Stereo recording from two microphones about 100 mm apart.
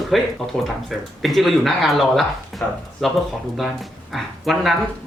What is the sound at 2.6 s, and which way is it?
Speech, 15° left (ahead or behind).